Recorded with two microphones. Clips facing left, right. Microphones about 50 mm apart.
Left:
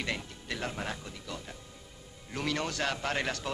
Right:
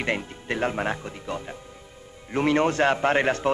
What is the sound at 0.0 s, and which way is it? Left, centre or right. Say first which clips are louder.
A man's voice: right 8 dB; right.